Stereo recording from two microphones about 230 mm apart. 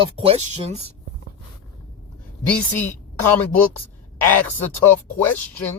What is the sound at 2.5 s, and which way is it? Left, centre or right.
Speech, centre.